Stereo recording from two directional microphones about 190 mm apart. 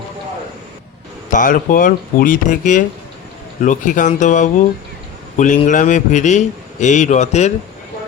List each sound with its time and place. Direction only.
1.3 s a man's voice: 45° left (ahead or behind)